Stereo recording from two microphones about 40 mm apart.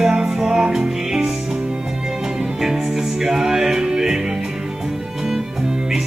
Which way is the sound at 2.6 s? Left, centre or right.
Centre.